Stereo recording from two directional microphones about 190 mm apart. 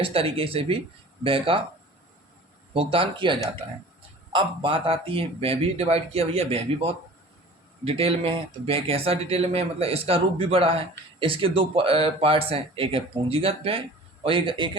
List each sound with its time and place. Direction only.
0.0 s speech: 30° right (ahead or behind)
2.7 s a man's voice: 30° right (ahead or behind)